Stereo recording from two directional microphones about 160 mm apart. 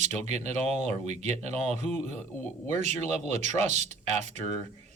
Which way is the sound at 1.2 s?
45° right (ahead or behind).